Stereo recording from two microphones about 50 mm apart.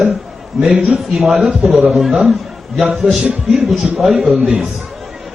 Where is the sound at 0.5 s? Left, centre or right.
Centre.